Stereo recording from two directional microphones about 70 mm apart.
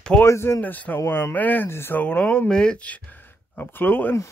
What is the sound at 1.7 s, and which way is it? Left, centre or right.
Speech, left.